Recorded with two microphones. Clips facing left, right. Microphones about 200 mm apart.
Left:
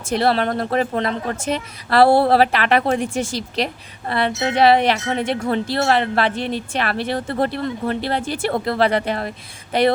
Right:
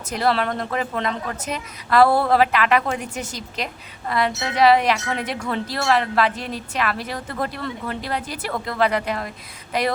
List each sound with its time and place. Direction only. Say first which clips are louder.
0.0 s speech: left 3 dB; 30° left (ahead or behind)